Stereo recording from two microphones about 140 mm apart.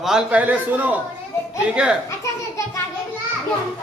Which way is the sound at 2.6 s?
20° left (ahead or behind).